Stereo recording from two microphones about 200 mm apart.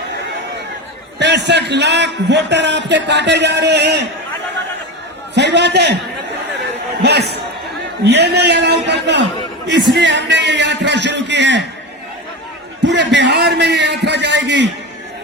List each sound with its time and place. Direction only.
1.2 s a man's voice: 60° right (ahead or behind)
5.3 s a man's voice: 60° right (ahead or behind)
6.6 s a sound: 55° right (ahead or behind)
8.0 s a man's voice: 55° right (ahead or behind)
12.8 s a man's voice: 60° right (ahead or behind)